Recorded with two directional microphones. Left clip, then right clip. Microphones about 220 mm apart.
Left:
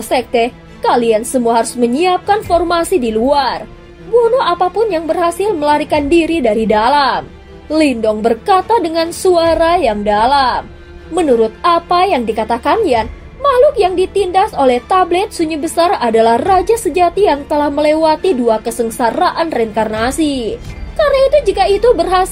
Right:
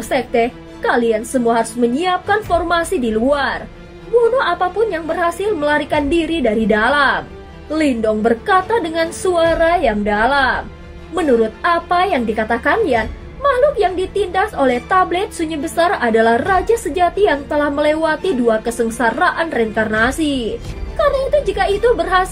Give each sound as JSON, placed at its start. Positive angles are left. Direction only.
{"t": 0.1, "sound": "a woman's voice", "side_deg": 30}